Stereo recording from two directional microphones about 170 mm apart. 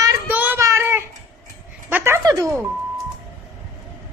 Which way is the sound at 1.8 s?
15° right (ahead or behind).